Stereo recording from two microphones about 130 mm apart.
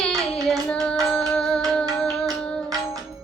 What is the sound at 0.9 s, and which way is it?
Music, 5° left (ahead or behind).